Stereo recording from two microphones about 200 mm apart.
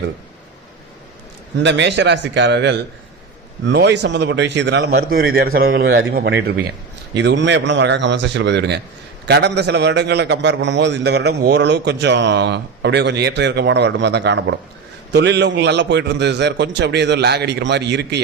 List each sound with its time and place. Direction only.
1.5 s a man's voice: 65° right (ahead or behind)